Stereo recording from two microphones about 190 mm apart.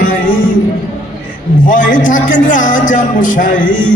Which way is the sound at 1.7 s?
45° left (ahead or behind).